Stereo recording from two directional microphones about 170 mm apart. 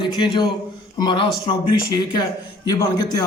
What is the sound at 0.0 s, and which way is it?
A man's voice, 25° left (ahead or behind).